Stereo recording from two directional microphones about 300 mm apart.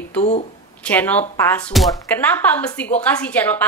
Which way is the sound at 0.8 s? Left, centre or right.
Centre.